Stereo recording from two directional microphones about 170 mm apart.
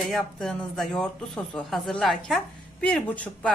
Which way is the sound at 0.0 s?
5° left (ahead or behind).